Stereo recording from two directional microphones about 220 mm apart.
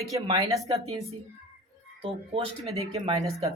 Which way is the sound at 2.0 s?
25° right (ahead or behind).